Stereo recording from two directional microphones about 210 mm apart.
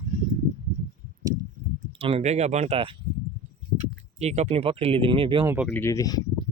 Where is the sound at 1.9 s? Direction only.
30° right (ahead or behind).